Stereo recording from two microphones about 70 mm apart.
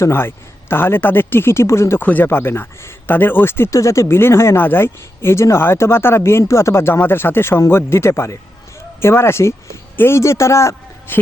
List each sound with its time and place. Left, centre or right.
0.0 s speech: left
2.0 s speech: left
11.1 s speech: left